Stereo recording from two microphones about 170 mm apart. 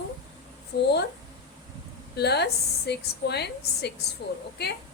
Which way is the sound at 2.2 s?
75° left (ahead or behind).